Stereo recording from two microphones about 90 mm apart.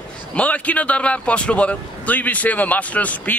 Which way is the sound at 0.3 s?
15° left (ahead or behind).